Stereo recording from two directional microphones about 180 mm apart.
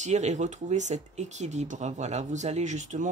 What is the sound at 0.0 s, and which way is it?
Speech, 40° right (ahead or behind).